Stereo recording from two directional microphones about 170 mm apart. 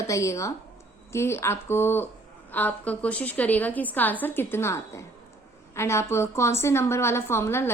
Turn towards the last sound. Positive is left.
turn(degrees=15)  # may be behind; listen again after turning